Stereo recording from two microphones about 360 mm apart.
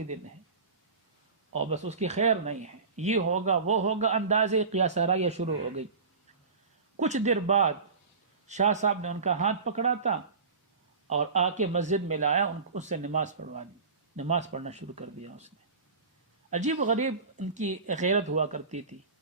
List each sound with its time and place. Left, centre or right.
1.5 s speech: centre
7.0 s speech: centre